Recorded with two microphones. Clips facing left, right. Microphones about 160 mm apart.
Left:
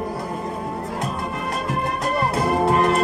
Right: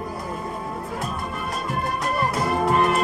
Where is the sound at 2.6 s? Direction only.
35° left (ahead or behind).